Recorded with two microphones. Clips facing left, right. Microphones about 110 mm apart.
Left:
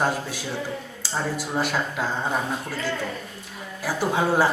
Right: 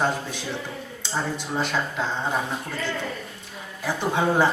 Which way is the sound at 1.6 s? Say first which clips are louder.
Even; 5° left (ahead or behind).